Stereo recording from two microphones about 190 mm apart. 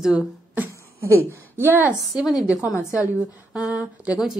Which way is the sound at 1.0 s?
10° left (ahead or behind).